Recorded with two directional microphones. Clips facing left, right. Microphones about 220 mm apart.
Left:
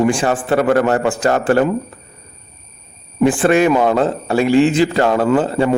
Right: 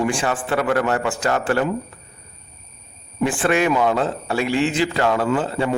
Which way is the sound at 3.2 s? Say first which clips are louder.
Left 6 dB; 40° left (ahead or behind).